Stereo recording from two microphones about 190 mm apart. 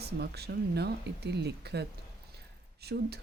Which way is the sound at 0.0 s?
60° right (ahead or behind).